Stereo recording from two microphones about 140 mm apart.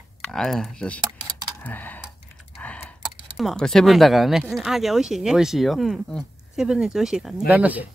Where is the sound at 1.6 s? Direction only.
10° left (ahead or behind).